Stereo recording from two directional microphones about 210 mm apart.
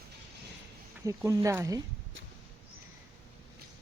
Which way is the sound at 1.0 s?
15° right (ahead or behind).